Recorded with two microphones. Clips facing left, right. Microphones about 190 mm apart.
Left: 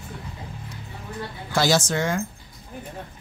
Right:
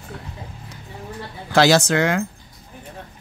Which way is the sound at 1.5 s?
70° right (ahead or behind).